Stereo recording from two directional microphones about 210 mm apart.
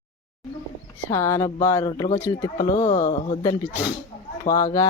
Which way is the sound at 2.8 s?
35° left (ahead or behind).